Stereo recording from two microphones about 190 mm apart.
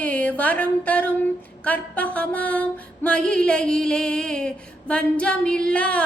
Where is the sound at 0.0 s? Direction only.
10° left (ahead or behind).